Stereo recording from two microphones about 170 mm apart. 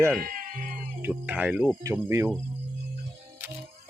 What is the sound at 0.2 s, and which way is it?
Cat, 55° right (ahead or behind).